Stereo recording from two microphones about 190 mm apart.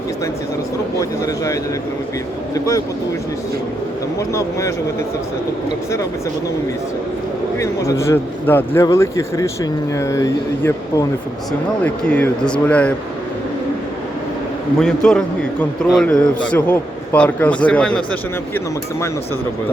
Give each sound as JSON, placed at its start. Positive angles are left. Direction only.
{"t": 7.6, "sound": "a man's voice", "side_deg": 15}
{"t": 14.8, "sound": "a man's voice", "side_deg": 5}